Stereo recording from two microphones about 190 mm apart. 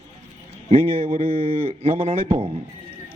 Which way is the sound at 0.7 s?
35° right (ahead or behind).